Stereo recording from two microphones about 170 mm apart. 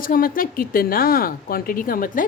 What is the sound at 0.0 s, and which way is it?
Speech, 55° left (ahead or behind).